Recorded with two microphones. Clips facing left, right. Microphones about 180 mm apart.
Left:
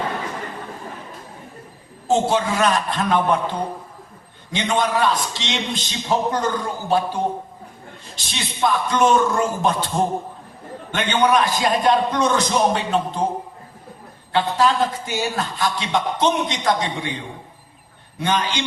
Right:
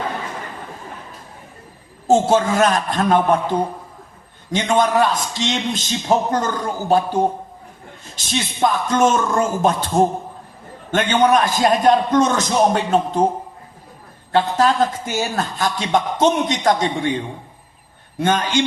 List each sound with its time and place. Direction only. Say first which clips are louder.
2.0 s a man's voice: right 4 dB; 45° right (ahead or behind)
4.5 s a man's voice: right 4 dB; 45° right (ahead or behind)
14.3 s a man's voice: right 2 dB; 45° right (ahead or behind)
18.2 s a man's voice: right 4 dB; 45° right (ahead or behind)